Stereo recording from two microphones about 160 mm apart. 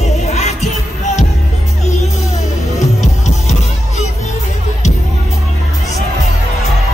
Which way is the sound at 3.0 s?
50° left (ahead or behind).